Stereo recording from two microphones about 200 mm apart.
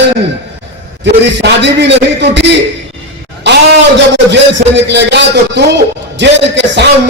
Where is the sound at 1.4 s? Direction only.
60° right (ahead or behind).